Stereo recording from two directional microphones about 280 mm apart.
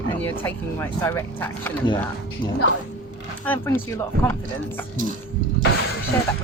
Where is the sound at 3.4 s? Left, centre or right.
Centre.